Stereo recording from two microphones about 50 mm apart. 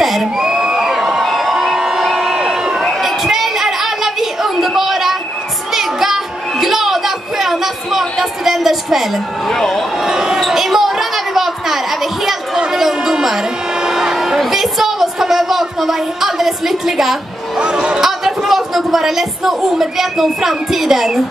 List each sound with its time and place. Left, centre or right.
0.0 s crowd: centre
3.0 s a sound: centre
9.5 s speech: centre
10.0 s basketball bounce: centre
10.4 s a sound: centre
14.5 s a woman's voice: centre
17.6 s speech: centre
18.0 s a man's voice: centre